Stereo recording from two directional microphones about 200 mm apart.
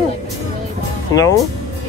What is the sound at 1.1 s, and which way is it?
Speech, 90° left.